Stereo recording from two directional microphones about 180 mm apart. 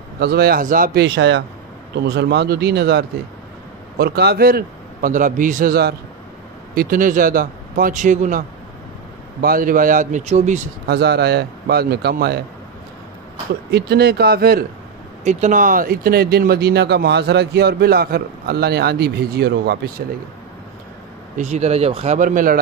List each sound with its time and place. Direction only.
0.2 s speech: 60° right (ahead or behind)
1.0 s a man's voice: 80° right
2.0 s speech: 65° right (ahead or behind); by 10.6 s 40° right (ahead or behind)
10.9 s speech: 65° right (ahead or behind)
13.7 s speech: 65° right (ahead or behind)
15.2 s speech: 45° right (ahead or behind); by 19.8 s 65° right (ahead or behind)
21.4 s speech: 40° right (ahead or behind)